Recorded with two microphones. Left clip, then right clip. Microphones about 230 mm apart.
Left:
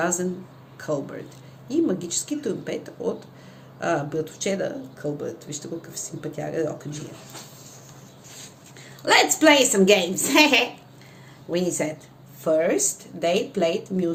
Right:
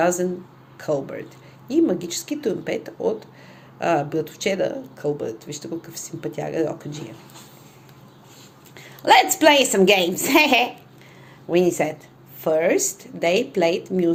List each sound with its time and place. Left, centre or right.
0.0 s speech: right
9.0 s speech: right